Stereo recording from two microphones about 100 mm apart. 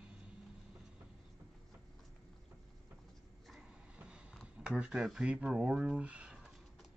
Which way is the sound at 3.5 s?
10° right (ahead or behind).